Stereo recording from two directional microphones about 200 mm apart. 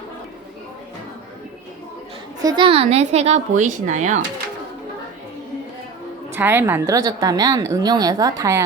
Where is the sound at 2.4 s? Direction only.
20° right (ahead or behind); by 4.2 s 35° right (ahead or behind).